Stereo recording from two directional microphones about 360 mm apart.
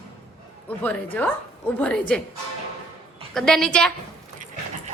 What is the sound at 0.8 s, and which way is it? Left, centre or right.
Speech, centre.